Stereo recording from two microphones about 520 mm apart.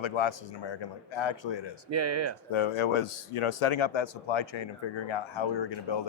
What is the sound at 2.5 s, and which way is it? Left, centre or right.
Speech, left.